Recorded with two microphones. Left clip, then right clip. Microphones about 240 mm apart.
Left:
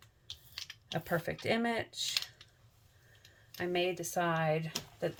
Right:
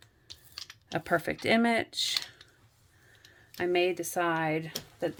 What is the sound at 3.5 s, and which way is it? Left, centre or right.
Speech, right.